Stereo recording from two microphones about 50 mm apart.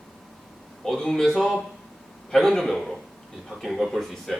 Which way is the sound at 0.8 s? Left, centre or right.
Centre.